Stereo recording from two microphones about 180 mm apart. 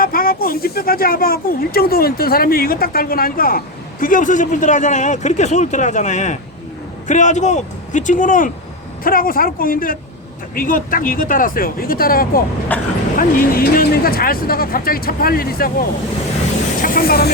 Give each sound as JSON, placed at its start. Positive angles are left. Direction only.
{"t": 0.0, "sound": "speech", "side_deg": 55}
{"t": 12.7, "sound": "speech", "side_deg": 10}
{"t": 13.1, "sound": "speech", "side_deg": 55}